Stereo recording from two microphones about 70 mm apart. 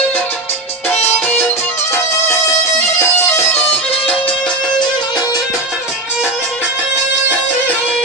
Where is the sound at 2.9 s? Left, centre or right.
Left.